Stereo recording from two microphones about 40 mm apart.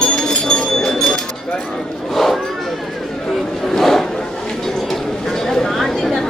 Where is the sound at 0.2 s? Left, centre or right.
Centre.